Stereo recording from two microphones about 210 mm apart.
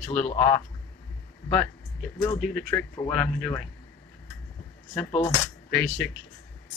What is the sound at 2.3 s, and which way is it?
Speech, 5° left (ahead or behind).